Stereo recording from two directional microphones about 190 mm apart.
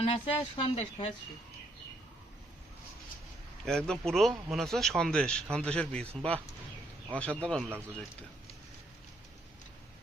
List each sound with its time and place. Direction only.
0.1 s speech: 30° left (ahead or behind)
3.7 s speech: 5° left (ahead or behind)